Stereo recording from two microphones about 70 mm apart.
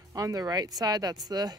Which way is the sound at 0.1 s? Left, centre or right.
Right.